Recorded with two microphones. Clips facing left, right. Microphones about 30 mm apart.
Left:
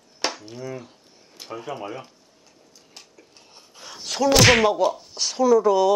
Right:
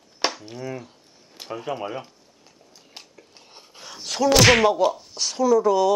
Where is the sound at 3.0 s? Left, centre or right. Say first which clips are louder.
Right 1 dB; centre.